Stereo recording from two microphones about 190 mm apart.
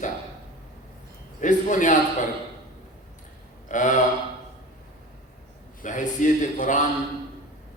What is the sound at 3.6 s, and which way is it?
Speech, 40° left (ahead or behind).